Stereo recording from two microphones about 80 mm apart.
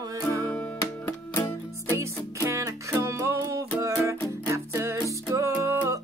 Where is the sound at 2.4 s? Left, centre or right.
Right.